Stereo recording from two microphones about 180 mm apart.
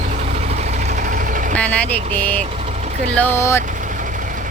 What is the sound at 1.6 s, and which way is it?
Speech, 10° left (ahead or behind).